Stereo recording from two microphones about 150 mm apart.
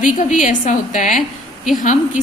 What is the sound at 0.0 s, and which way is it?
A woman's voice, 55° left (ahead or behind).